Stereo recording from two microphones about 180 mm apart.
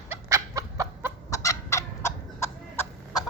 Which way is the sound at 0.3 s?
15° right (ahead or behind).